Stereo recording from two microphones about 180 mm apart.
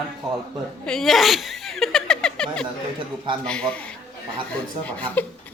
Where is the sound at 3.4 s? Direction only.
5° left (ahead or behind).